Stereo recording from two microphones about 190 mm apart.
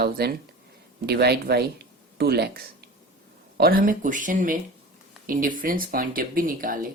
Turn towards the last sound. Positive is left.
turn(degrees=-45)  # may be behind; listen again after turning